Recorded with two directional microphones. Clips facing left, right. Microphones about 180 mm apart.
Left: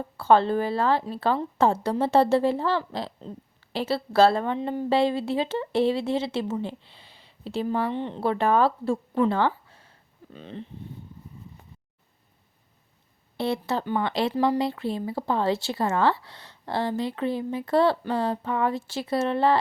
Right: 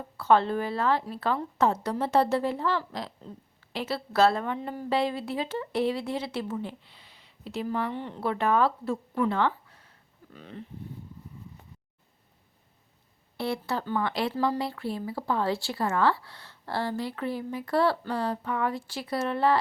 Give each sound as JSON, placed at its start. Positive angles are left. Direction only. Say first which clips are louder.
{"t": 0.2, "sound": "a woman's voice", "louder": "left 3 dB", "side_deg": 30}
{"t": 13.3, "sound": "a woman's voice", "louder": "left 4 dB", "side_deg": 25}